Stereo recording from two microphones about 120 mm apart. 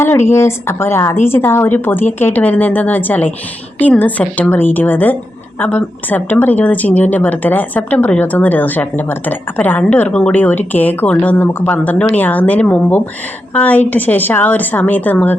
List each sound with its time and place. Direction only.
0.0 s speech: 20° left (ahead or behind)